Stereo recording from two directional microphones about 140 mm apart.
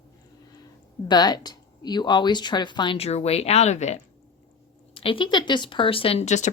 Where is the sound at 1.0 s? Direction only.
30° left (ahead or behind).